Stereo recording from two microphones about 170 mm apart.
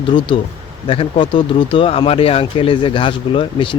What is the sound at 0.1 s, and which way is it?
Speech, 30° left (ahead or behind).